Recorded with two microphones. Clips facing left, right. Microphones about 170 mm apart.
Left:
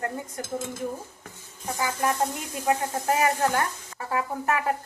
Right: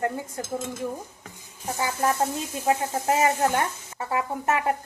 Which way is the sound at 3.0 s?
25° right (ahead or behind).